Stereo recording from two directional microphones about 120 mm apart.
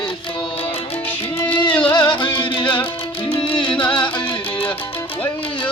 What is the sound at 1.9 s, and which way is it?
Music, 40° left (ahead or behind).